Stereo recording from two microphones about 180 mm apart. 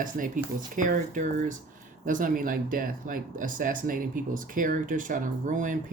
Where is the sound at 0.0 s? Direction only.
50° right (ahead or behind).